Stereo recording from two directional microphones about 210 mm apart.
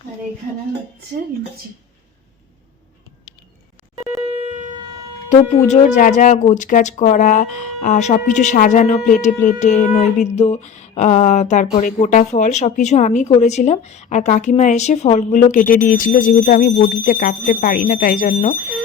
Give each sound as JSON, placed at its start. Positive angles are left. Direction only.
{"t": 5.3, "sound": "speech", "side_deg": 35}